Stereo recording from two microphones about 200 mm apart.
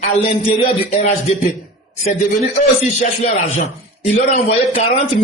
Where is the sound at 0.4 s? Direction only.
35° left (ahead or behind).